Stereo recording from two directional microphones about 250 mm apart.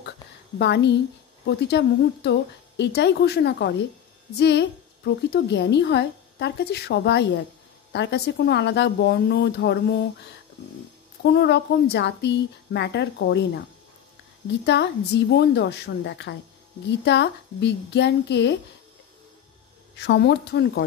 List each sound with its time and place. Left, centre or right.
0.6 s a woman's voice: left
11.2 s a woman's voice: left
20.0 s a woman's voice: left